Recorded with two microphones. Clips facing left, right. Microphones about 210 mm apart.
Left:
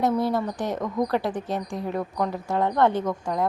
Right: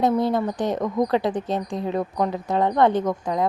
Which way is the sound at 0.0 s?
20° right (ahead or behind).